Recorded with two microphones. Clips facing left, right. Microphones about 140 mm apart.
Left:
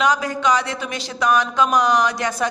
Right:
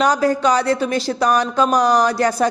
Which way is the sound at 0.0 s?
35° right (ahead or behind).